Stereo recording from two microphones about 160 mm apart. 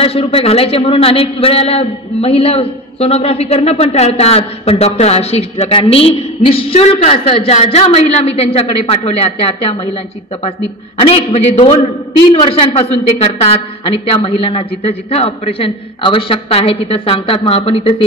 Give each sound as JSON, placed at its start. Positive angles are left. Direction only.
{"t": 0.0, "sound": "a man's voice", "side_deg": 35}
{"t": 11.0, "sound": "a man's voice", "side_deg": 40}